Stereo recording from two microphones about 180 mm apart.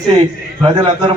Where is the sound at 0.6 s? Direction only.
30° right (ahead or behind).